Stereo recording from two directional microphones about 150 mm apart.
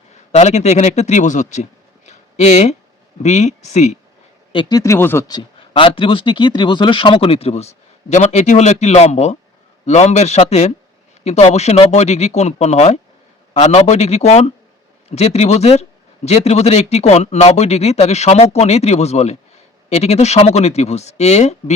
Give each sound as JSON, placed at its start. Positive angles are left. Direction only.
{"t": 0.3, "sound": "speech", "side_deg": 50}
{"t": 2.0, "sound": "a sound", "side_deg": 50}
{"t": 3.2, "sound": "speech", "side_deg": 50}
{"t": 4.5, "sound": "speech", "side_deg": 25}
{"t": 5.3, "sound": "speech", "side_deg": 35}